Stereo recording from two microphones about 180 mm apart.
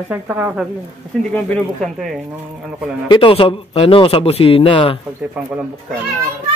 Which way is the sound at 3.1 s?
30° left (ahead or behind).